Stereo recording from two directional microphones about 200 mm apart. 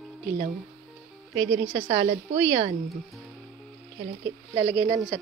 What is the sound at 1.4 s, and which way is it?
A woman's voice, 30° right (ahead or behind).